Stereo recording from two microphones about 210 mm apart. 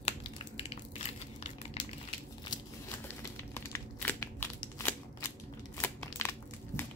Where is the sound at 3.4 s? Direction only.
10° left (ahead or behind).